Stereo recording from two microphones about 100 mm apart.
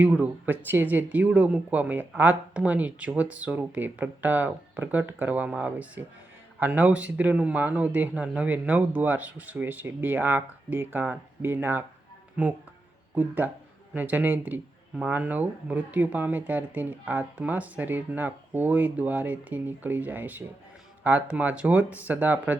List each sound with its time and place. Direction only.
0.0 s speech: 15° right (ahead or behind)
13.1 s speech: 15° right (ahead or behind)